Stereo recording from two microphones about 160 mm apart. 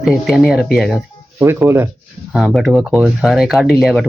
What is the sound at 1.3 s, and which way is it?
Speech, 15° right (ahead or behind).